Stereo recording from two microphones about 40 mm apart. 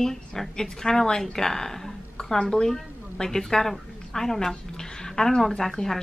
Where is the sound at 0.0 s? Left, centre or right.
Centre.